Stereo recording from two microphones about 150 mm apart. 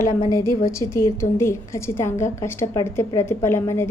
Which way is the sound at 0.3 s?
20° left (ahead or behind).